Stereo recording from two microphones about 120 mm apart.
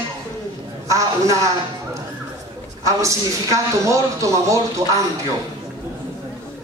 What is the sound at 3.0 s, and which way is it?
Speech, 25° right (ahead or behind).